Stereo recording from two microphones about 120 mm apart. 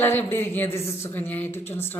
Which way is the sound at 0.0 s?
15° left (ahead or behind).